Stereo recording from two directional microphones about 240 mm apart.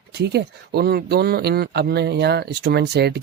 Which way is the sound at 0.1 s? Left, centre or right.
Right.